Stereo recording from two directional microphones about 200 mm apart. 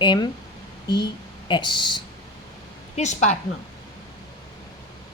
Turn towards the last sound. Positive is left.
turn(degrees=35)  # may be behind; listen again after turning